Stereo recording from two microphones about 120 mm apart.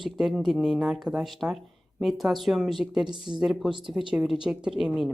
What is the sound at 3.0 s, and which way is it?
Speech, 40° right (ahead or behind).